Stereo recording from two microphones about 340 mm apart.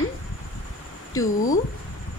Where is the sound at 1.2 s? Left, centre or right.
Centre.